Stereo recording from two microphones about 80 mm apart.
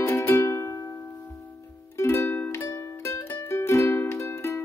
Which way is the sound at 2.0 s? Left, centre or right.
Left.